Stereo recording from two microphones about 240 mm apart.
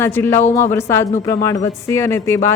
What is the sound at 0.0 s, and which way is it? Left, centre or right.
Speech, centre.